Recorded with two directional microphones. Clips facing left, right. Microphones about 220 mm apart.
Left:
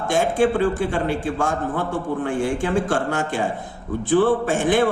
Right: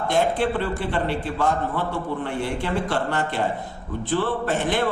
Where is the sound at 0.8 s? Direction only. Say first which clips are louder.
Left 3 dB; 45° left (ahead or behind).